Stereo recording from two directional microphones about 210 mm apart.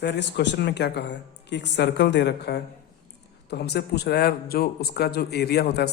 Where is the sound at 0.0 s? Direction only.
55° left (ahead or behind).